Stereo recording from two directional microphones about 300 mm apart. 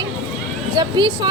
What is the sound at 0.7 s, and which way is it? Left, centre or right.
Speech, centre.